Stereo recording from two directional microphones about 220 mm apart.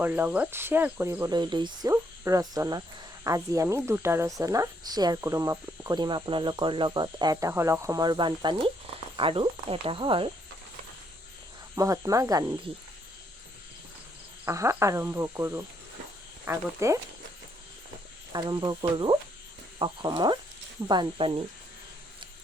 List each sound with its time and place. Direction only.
0.0 s speech: 10° right (ahead or behind)
11.7 s speech: 15° right (ahead or behind)
14.4 s speech: 15° right (ahead or behind)
18.3 s speech: 20° right (ahead or behind)